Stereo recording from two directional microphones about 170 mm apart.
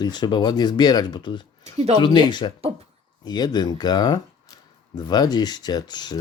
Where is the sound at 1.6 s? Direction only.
40° right (ahead or behind).